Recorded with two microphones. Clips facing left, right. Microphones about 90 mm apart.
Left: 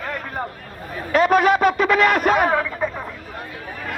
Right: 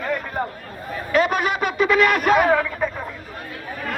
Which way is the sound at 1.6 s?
30° left (ahead or behind).